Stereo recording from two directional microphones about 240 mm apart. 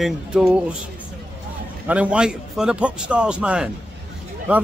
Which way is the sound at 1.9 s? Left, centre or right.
Centre.